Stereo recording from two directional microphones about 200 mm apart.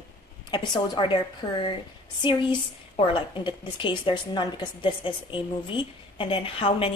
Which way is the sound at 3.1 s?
25° left (ahead or behind).